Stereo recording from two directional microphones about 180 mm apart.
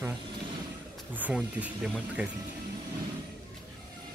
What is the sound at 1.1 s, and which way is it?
Speech, 10° right (ahead or behind).